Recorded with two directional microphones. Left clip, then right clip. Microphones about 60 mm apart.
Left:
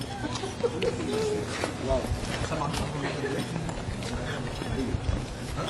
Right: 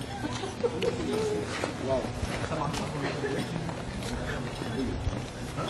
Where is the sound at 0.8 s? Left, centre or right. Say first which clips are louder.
Left 1 dB; left.